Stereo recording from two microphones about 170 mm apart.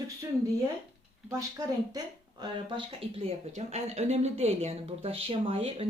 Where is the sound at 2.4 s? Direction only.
25° right (ahead or behind).